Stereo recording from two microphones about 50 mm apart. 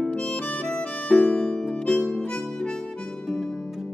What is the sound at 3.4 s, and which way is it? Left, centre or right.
Music, centre.